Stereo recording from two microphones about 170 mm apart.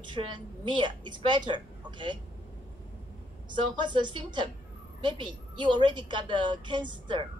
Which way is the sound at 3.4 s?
25° right (ahead or behind).